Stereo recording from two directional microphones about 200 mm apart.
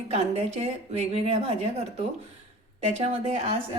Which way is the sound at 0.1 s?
30° right (ahead or behind).